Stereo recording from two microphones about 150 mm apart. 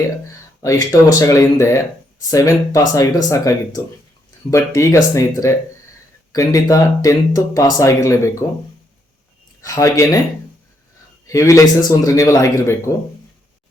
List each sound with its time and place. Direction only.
0.6 s speech: 20° left (ahead or behind)
9.6 s speech: 20° left (ahead or behind)
11.3 s speech: 20° left (ahead or behind)